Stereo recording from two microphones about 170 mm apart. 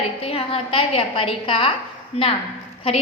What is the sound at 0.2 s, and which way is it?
A woman's voice, 35° left (ahead or behind).